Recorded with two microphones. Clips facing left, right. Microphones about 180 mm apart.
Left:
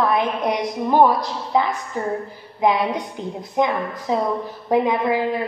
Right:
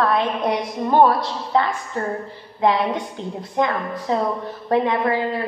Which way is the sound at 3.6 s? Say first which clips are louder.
Left 1 dB; 10° left (ahead or behind).